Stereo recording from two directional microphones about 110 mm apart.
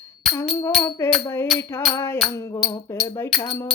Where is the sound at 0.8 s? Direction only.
30° left (ahead or behind).